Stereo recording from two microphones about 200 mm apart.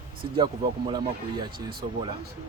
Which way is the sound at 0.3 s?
25° right (ahead or behind).